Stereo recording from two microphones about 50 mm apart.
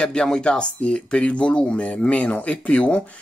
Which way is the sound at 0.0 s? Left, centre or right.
Centre.